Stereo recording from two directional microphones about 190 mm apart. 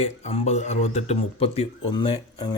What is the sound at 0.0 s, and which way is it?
Speech, 35° left (ahead or behind).